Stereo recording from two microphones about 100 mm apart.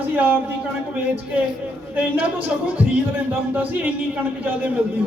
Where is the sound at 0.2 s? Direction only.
15° right (ahead or behind).